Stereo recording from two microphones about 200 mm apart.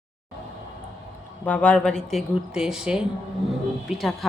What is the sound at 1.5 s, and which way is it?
Speech, 5° left (ahead or behind).